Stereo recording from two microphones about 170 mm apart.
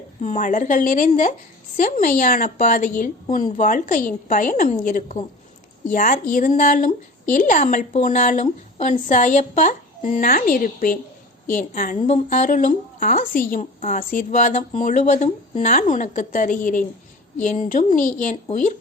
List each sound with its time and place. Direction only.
0.2 s a woman's voice: 45° left (ahead or behind)